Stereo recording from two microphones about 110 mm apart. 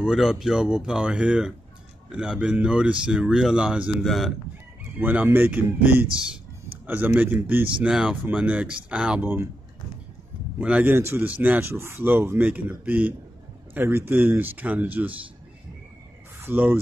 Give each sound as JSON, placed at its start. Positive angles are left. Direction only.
{"t": 0.0, "sound": "speech", "side_deg": -5}
{"t": 4.0, "sound": "speech", "side_deg": 0}
{"t": 4.9, "sound": "speech", "side_deg": -15}
{"t": 10.6, "sound": "speech", "side_deg": -15}
{"t": 16.3, "sound": "speech", "side_deg": -20}